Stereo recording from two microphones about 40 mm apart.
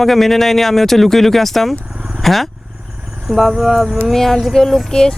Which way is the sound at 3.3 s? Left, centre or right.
Centre.